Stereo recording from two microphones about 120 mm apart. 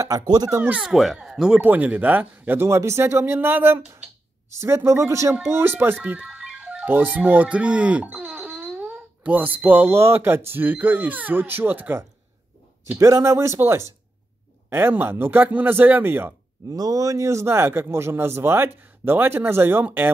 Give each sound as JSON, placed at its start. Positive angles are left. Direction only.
{"t": 0.0, "sound": "speech", "side_deg": -30}
{"t": 0.6, "sound": "a man's voice", "side_deg": -10}
{"t": 16.6, "sound": "a man's voice", "side_deg": -30}